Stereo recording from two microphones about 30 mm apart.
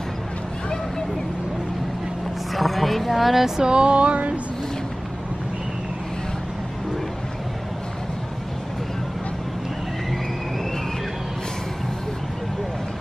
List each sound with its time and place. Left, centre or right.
2.5 s speech: centre
3.6 s music: right